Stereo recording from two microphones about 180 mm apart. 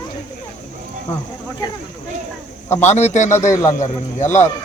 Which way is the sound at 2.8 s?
40° left (ahead or behind).